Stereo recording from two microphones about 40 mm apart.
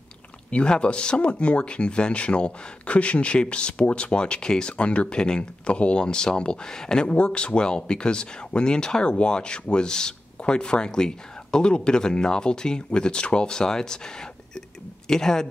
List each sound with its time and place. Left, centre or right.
0.5 s speech: left
7.2 s speech: left